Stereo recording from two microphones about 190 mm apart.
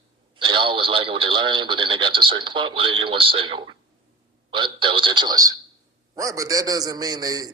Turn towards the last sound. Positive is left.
turn(degrees=-20)  # may be behind; listen again after turning